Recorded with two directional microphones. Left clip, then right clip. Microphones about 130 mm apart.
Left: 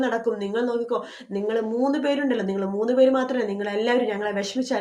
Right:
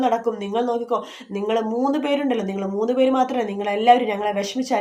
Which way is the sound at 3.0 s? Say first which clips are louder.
Even; 15° right (ahead or behind).